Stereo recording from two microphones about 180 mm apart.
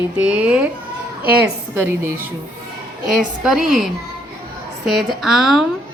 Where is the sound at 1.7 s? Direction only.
15° right (ahead or behind).